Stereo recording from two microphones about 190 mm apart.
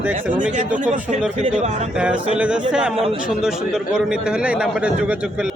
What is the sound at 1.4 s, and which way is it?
Speech, 35° right (ahead or behind).